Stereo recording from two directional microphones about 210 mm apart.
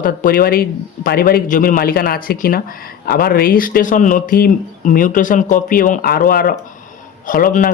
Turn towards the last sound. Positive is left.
turn(degrees=40)  # may be behind; listen again after turning